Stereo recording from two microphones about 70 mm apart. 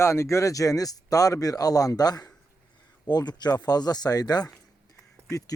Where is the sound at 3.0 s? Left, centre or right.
Left.